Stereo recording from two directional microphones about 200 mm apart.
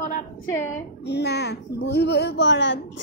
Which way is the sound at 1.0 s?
55° left (ahead or behind).